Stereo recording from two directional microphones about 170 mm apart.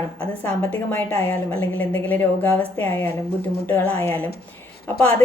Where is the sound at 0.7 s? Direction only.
10° left (ahead or behind).